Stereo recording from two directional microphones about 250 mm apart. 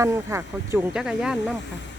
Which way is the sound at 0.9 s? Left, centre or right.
Centre.